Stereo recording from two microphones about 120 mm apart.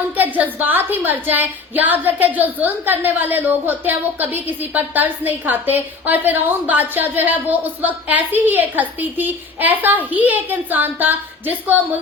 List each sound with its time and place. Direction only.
0.3 s a woman's voice: 15° right (ahead or behind)